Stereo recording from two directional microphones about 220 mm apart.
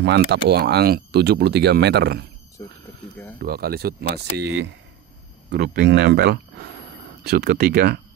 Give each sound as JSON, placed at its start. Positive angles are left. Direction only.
{"t": 0.0, "sound": "speech", "side_deg": -50}
{"t": 2.6, "sound": "speech", "side_deg": 15}
{"t": 3.3, "sound": "speech", "side_deg": -45}